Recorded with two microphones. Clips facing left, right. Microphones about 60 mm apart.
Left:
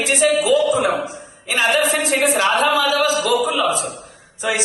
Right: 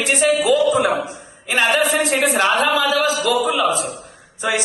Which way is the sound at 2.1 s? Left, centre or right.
Right.